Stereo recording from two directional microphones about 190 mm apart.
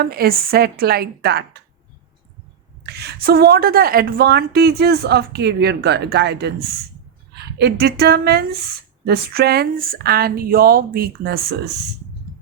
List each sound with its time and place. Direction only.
0.0 s speech: 55° right (ahead or behind)
2.8 s speech: 60° right (ahead or behind)